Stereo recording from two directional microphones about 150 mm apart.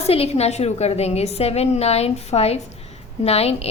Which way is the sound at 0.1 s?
40° left (ahead or behind).